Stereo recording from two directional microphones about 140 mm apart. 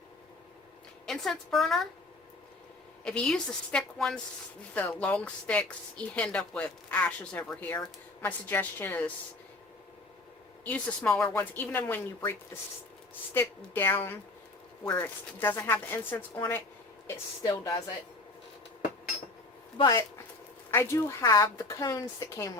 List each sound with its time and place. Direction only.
1.0 s a woman's voice: centre (ahead or behind)
3.0 s a woman's voice: 5° left (ahead or behind)
10.6 s speech: 10° left (ahead or behind)
13.6 s a woman's voice: 15° left (ahead or behind)
19.8 s a woman's voice: 25° left (ahead or behind)